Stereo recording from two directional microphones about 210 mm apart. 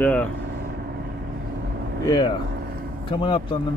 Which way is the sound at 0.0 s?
5° left (ahead or behind).